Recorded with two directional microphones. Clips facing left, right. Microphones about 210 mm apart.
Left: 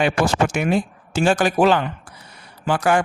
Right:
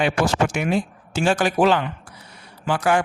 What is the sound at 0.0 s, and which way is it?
A man's voice, 45° left (ahead or behind).